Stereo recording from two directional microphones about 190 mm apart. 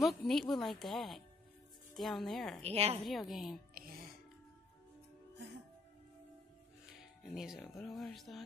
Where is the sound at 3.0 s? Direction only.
Centre (ahead or behind).